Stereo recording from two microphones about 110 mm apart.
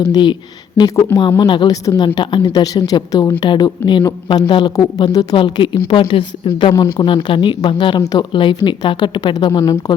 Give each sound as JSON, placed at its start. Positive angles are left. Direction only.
{"t": 0.0, "sound": "a woman's voice", "side_deg": 40}
{"t": 9.5, "sound": "speech", "side_deg": 30}